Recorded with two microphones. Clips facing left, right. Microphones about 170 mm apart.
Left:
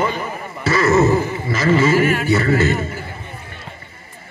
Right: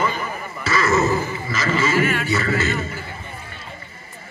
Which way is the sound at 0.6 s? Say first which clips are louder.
Left 5 dB; 60° left (ahead or behind).